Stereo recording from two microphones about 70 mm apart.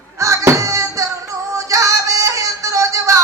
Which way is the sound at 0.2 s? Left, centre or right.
Right.